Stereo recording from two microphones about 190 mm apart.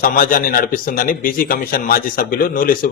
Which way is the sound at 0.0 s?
50° left (ahead or behind).